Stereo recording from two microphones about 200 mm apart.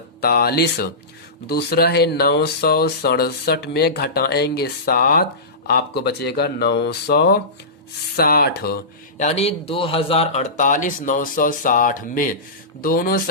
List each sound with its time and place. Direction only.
0.2 s speech: 50° left (ahead or behind)
9.1 s speech: 35° left (ahead or behind)